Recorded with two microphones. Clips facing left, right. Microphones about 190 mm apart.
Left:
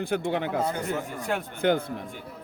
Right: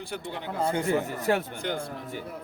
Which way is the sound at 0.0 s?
60° left (ahead or behind).